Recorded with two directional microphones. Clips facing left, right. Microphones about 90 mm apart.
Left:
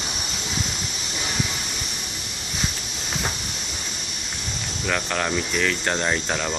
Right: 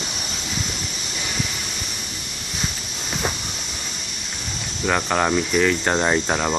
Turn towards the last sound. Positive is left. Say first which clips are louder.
# right 4 dB
turn(degrees=-20)  # may be behind; listen again after turning